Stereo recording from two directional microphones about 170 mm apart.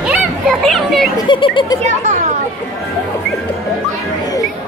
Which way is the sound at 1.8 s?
45° right (ahead or behind).